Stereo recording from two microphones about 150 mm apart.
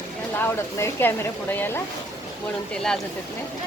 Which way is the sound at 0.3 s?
15° left (ahead or behind).